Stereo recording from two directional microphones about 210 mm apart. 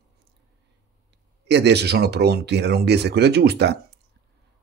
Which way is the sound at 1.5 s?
55° right (ahead or behind).